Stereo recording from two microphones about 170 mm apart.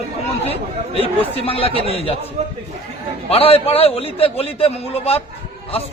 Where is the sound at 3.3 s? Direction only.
35° left (ahead or behind).